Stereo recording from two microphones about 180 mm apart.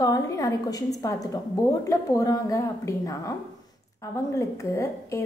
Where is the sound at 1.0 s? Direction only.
20° left (ahead or behind).